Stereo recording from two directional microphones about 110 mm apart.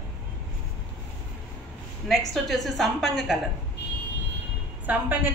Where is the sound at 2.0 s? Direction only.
Centre (ahead or behind).